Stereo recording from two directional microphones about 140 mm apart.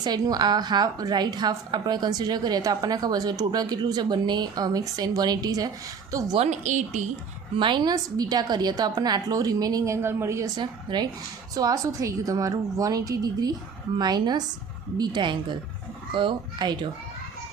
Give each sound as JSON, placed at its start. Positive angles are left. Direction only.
{"t": 0.0, "sound": "a woman's voice", "side_deg": -30}
{"t": 6.3, "sound": "speech", "side_deg": -50}
{"t": 7.5, "sound": "a woman's voice", "side_deg": -35}